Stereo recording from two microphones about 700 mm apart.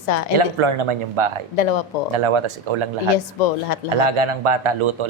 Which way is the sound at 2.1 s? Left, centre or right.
Right.